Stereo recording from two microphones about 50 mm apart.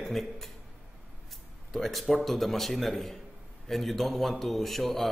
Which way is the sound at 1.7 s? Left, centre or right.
Centre.